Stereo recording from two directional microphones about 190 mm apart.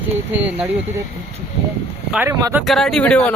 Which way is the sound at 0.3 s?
5° right (ahead or behind).